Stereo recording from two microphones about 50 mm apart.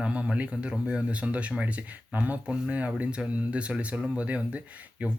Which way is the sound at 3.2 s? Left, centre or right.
Centre.